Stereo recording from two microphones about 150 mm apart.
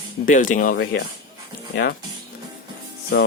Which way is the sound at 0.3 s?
60° left (ahead or behind).